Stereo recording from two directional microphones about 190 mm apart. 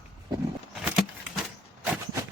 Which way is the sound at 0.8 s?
5° right (ahead or behind).